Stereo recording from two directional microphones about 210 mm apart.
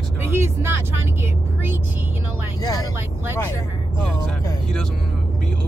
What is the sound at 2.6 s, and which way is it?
Vehicle, 20° left (ahead or behind).